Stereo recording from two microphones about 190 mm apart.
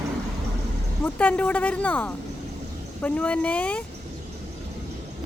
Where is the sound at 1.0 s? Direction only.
5° left (ahead or behind).